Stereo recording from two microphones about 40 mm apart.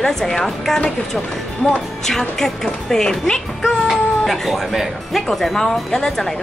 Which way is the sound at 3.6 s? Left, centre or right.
Centre.